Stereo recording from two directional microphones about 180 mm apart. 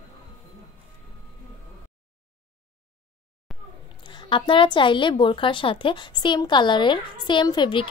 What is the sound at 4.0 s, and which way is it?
A woman's voice, 25° left (ahead or behind).